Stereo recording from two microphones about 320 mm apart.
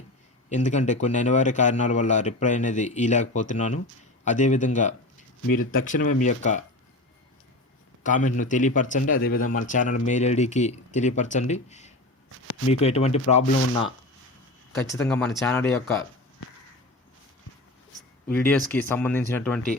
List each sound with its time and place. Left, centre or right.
0.5 s speech: left
8.0 s speech: left
14.8 s speech: centre
18.7 s speech: centre